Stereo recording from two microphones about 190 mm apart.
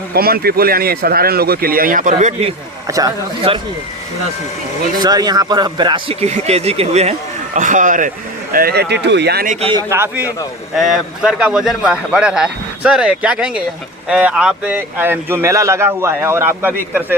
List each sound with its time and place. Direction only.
0.1 s speech: 55° right (ahead or behind); by 2.5 s 35° right (ahead or behind)
2.8 s speech: 20° right (ahead or behind)
4.9 s speech: 20° right (ahead or behind); by 8.1 s 45° right (ahead or behind)
8.5 s speech: 55° right (ahead or behind)
9.5 s speech: 35° right (ahead or behind)
9.7 s a man's voice: 15° right (ahead or behind)